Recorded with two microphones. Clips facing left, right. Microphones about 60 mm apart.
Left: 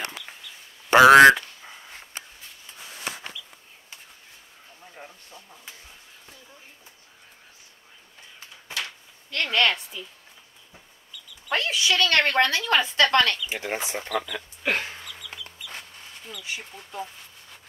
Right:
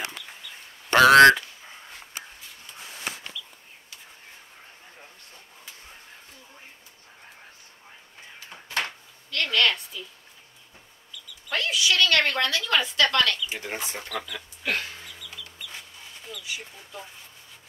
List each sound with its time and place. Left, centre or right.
0.8 s dog: centre
9.3 s a sound: left
11.4 s a sound: left
13.5 s speech: left
14.1 s speech: centre
14.6 s dog: left
15.1 s music: left
16.4 s speech: left